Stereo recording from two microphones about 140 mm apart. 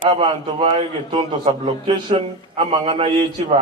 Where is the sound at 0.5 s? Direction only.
40° right (ahead or behind).